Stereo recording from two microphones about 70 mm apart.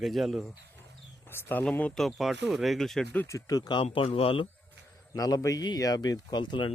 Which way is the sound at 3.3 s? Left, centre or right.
Left.